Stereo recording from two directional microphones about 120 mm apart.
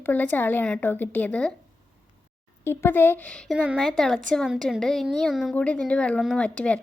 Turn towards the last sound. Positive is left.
turn(degrees=10)  # may be behind; listen again after turning